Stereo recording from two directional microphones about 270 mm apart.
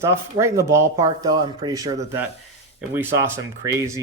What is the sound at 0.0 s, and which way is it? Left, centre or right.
Speech, centre.